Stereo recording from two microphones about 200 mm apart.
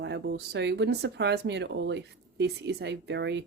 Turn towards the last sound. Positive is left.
turn(degrees=-60)  # may be behind; listen again after turning